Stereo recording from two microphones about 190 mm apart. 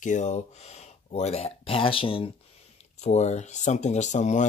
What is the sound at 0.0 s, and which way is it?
Speech, 40° left (ahead or behind).